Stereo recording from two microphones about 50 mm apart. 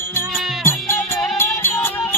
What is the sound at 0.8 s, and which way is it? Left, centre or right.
Music, left.